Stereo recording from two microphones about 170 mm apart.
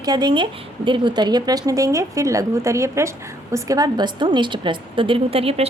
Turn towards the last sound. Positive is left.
turn(degrees=-35)  # may be behind; listen again after turning